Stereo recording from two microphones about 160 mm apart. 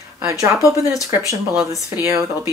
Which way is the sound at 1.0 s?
20° right (ahead or behind).